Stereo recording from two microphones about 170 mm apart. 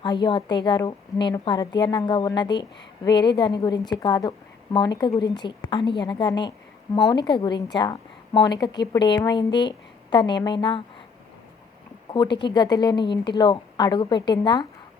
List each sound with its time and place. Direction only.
0.0 s a woman's voice: 25° left (ahead or behind)
12.1 s a woman's voice: 25° left (ahead or behind)